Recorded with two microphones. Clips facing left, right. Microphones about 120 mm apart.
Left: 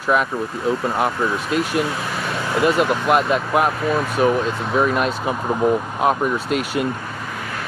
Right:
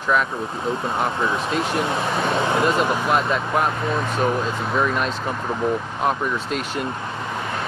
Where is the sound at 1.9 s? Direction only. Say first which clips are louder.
Right 3 dB; 25° right (ahead or behind).